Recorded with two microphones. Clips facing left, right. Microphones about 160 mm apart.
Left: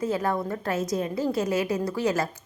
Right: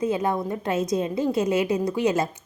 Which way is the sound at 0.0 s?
20° right (ahead or behind).